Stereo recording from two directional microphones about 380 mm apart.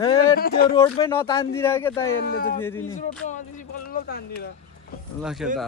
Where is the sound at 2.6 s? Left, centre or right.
Centre.